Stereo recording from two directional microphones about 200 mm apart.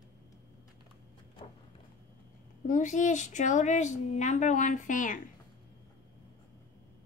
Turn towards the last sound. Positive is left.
turn(degrees=40)  # may be behind; listen again after turning